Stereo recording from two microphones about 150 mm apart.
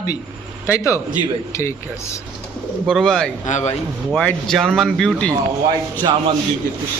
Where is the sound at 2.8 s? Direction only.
Centre (ahead or behind).